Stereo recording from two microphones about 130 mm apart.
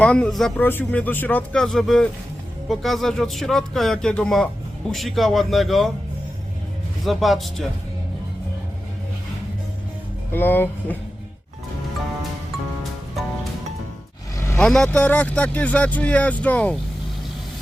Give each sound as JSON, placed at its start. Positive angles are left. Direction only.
{"t": 0.0, "sound": "speech", "side_deg": 10}
{"t": 0.6, "sound": "speech", "side_deg": 15}
{"t": 7.0, "sound": "speech", "side_deg": 0}
{"t": 10.3, "sound": "speech", "side_deg": 15}
{"t": 14.3, "sound": "vehicle", "side_deg": 20}
{"t": 14.6, "sound": "speech", "side_deg": 5}